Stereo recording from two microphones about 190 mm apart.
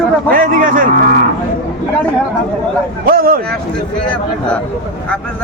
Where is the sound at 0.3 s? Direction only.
45° right (ahead or behind).